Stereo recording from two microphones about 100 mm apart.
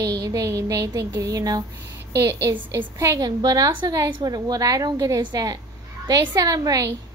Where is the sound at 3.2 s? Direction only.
40° right (ahead or behind).